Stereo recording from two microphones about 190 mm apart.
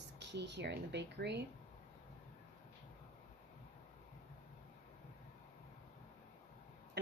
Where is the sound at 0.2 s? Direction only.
65° right (ahead or behind).